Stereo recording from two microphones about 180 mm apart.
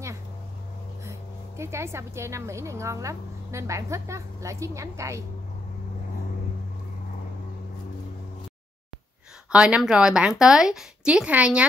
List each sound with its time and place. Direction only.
1.6 s a woman's voice: 15° right (ahead or behind)
9.5 s a woman's voice: 5° right (ahead or behind)